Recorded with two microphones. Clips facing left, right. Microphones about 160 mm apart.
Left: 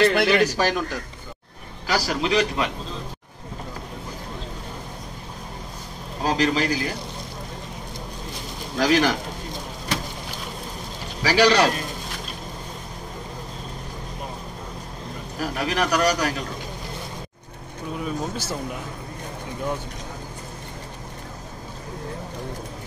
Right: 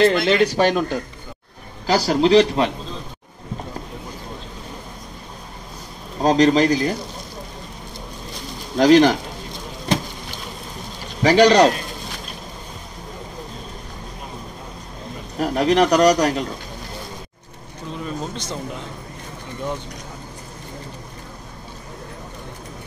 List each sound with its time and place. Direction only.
0.1 s speech: 65° left (ahead or behind)
0.5 s a man's voice: 25° right (ahead or behind)
6.2 s a man's voice: 30° right (ahead or behind)
8.7 s a man's voice: 30° right (ahead or behind)
11.2 s a man's voice: 30° right (ahead or behind)
15.3 s a man's voice: 30° right (ahead or behind)
18.0 s speech: 5° left (ahead or behind)